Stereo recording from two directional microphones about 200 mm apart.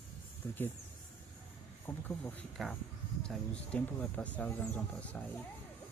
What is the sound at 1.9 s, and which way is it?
Speech, 10° left (ahead or behind).